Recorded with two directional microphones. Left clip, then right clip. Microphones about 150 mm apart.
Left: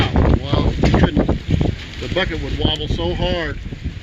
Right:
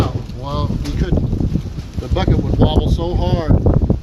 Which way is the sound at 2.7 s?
40° right (ahead or behind).